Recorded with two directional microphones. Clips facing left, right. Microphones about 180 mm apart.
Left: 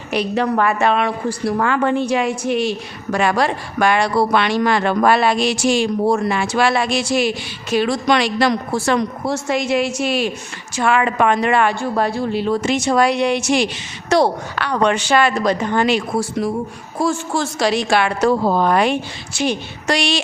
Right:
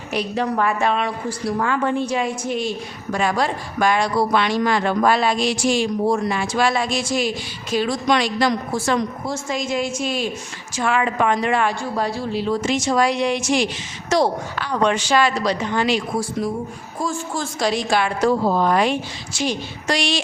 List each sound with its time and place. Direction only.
0.1 s a woman's voice: 70° left (ahead or behind)
17.0 s a woman's voice: 80° left